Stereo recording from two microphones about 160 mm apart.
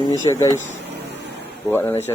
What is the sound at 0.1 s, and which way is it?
Speech, 20° left (ahead or behind).